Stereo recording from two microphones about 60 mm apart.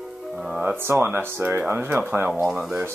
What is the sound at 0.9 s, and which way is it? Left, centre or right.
Speech, right.